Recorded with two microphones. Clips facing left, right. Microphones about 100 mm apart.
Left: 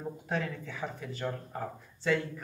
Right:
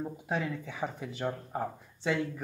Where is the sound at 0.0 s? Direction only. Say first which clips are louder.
Right 1 dB; 10° right (ahead or behind).